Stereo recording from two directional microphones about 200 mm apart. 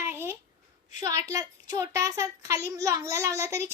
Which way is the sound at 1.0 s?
15° right (ahead or behind).